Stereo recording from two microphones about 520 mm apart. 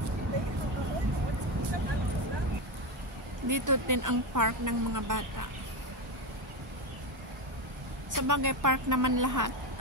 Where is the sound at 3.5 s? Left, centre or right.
Right.